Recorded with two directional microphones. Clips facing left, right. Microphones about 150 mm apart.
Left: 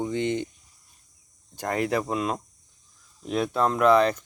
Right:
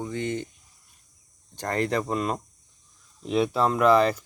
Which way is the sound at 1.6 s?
10° left (ahead or behind).